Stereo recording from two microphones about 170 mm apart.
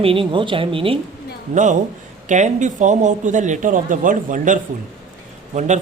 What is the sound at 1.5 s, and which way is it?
A man's voice, 45° right (ahead or behind).